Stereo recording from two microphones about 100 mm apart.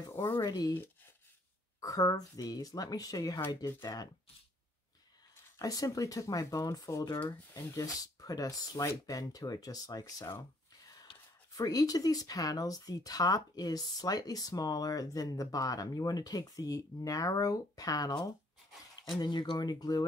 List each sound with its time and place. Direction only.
0.1 s a sound: 25° left (ahead or behind)
0.4 s speech: 40° left (ahead or behind)
1.8 s speech: 35° left (ahead or behind)
3.3 s speech: 20° left (ahead or behind)
3.8 s speech: 40° left (ahead or behind)
5.6 s speech: 35° left (ahead or behind)
11.5 s speech: 40° left (ahead or behind)